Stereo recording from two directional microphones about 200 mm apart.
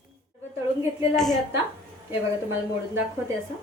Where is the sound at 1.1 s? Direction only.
Centre (ahead or behind).